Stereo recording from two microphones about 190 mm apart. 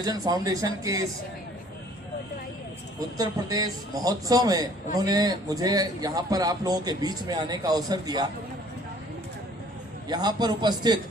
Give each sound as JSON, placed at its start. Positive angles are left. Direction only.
{"t": 0.0, "sound": "a man's voice", "side_deg": -20}
{"t": 3.2, "sound": "a man's voice", "side_deg": -20}
{"t": 10.1, "sound": "a man's voice", "side_deg": -20}